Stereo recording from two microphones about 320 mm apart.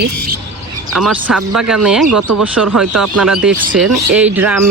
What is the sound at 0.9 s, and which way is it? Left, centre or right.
Speech, centre.